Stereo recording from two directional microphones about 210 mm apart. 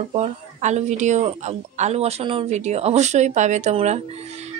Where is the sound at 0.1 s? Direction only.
35° right (ahead or behind).